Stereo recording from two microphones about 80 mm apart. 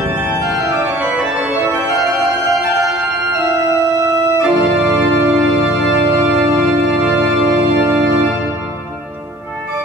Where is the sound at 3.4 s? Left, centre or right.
Right.